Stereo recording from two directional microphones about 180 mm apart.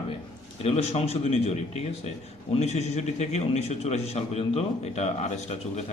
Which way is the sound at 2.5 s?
40° left (ahead or behind).